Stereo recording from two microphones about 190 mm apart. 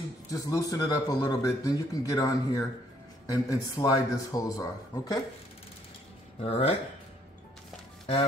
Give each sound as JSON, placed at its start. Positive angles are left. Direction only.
{"t": 0.3, "sound": "speech", "side_deg": 20}
{"t": 6.4, "sound": "speech", "side_deg": 30}